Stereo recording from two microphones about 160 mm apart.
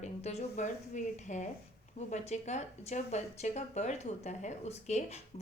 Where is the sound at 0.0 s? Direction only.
45° left (ahead or behind).